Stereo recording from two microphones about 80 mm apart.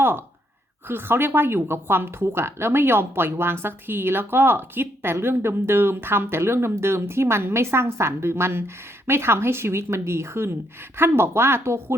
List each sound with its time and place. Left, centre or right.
0.9 s a woman's voice: right